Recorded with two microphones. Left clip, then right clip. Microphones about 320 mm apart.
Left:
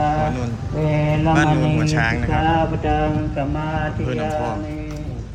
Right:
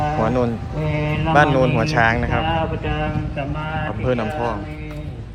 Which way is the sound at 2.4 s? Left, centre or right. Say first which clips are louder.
Left 3 dB; left.